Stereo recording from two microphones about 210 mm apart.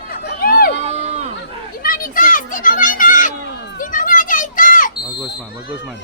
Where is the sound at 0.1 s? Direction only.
45° left (ahead or behind).